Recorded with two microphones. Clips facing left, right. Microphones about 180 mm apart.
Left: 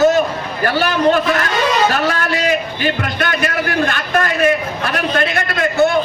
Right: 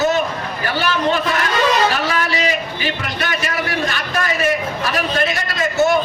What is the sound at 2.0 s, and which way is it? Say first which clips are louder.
A man's voice: left 3 dB; 50° left (ahead or behind).